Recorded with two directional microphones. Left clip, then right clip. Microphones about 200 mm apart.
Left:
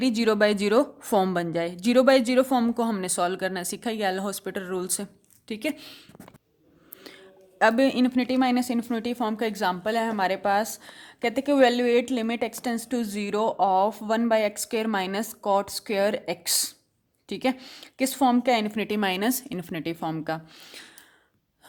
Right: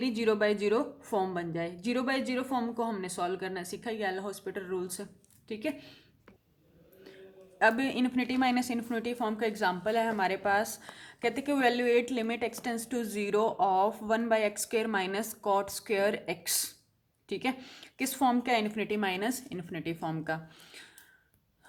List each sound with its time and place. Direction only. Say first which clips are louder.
0.0 s a woman's voice: left 6 dB; 45° left (ahead or behind)
7.6 s speech: left 6 dB; 40° left (ahead or behind)